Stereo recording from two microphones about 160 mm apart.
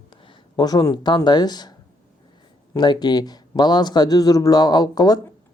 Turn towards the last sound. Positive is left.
turn(degrees=25)  # may be behind; listen again after turning